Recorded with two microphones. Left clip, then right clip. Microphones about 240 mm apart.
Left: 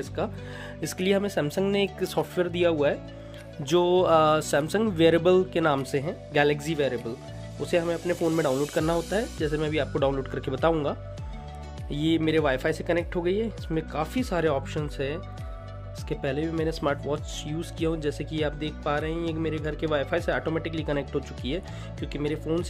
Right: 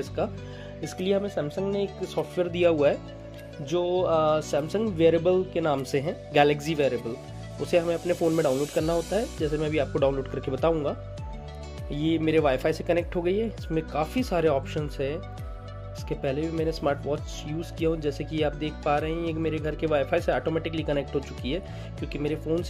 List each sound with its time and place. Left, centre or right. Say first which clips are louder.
0.0 s speech: right 1 dB; centre
0.8 s speech: left 1 dB; centre
2.3 s speech: right 3 dB; centre
3.6 s speech: left 3 dB; left
5.9 s speech: right 1 dB; centre
8.5 s speech: even; centre